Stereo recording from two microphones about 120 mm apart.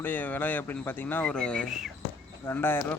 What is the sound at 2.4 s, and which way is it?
Speech, 20° left (ahead or behind).